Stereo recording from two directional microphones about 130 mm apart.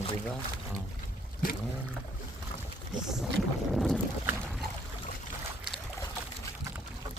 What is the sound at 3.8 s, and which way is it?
Boat, 5° left (ahead or behind).